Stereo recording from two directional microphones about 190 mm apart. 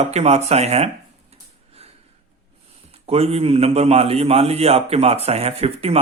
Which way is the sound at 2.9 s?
30° right (ahead or behind).